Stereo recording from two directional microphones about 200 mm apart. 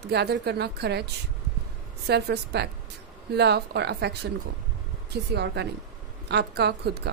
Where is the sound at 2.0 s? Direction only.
55° right (ahead or behind).